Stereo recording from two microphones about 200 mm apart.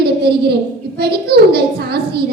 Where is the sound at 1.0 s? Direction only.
55° right (ahead or behind).